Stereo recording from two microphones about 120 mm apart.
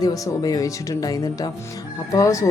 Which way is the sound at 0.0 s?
30° left (ahead or behind).